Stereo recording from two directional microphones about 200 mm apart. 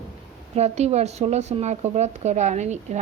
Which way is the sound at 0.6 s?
35° right (ahead or behind).